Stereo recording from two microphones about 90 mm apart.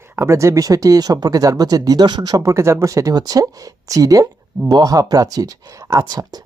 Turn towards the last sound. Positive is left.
turn(degrees=-45)  # may be behind; listen again after turning